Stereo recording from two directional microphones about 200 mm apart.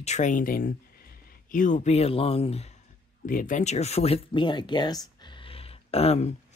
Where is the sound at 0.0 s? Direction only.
35° left (ahead or behind).